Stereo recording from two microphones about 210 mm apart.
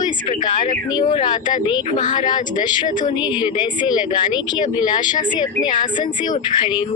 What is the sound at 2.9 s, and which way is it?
Speech, 40° left (ahead or behind).